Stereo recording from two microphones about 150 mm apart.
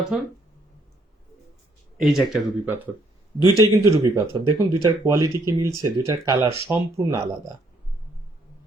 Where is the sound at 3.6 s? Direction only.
25° right (ahead or behind).